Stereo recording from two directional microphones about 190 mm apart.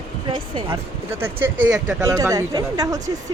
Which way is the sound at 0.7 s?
10° right (ahead or behind).